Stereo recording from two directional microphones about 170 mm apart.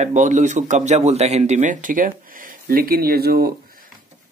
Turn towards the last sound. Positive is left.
turn(degrees=-65)  # may be behind; listen again after turning